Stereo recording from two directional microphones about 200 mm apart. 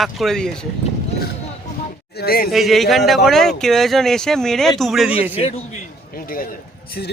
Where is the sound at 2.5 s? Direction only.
Centre (ahead or behind).